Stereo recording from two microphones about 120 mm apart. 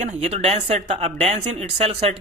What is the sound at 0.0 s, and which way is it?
Speech, 75° right (ahead or behind).